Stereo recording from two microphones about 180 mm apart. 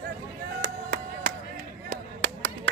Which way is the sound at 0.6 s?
50° right (ahead or behind).